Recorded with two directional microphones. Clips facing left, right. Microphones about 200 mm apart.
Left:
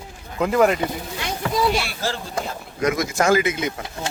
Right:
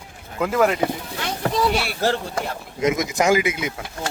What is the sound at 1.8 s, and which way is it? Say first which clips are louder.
Speech: right 6 dB; 60° right (ahead or behind).